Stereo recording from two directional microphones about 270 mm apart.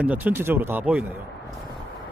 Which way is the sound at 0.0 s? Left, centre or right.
Centre.